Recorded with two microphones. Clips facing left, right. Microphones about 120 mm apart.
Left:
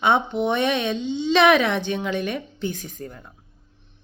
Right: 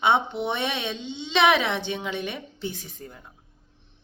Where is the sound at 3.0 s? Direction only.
50° left (ahead or behind).